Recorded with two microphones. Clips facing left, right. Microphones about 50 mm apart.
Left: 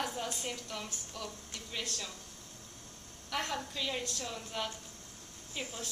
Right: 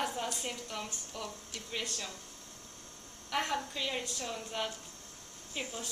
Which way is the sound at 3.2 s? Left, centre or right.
Centre.